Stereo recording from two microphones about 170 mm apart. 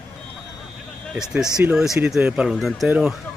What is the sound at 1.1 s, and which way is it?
Speech, 5° right (ahead or behind).